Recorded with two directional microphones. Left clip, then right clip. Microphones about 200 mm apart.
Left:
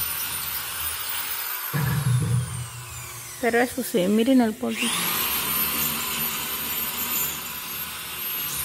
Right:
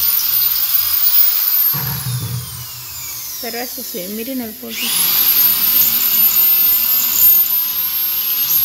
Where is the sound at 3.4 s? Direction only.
20° left (ahead or behind).